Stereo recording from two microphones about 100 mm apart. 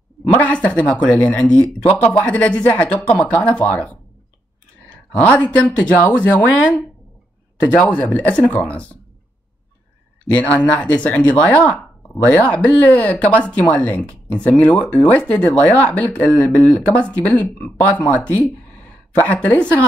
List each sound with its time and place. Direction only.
0.3 s speech: 15° left (ahead or behind)
10.3 s speech: 15° left (ahead or behind)